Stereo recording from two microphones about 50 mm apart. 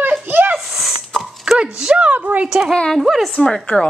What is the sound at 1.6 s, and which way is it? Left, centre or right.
Speech, centre.